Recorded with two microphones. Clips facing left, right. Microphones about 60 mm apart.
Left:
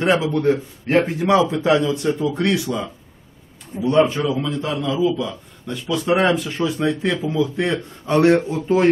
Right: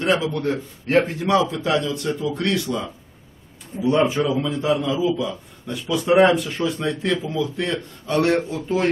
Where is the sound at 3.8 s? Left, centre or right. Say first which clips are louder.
Left 2 dB; centre.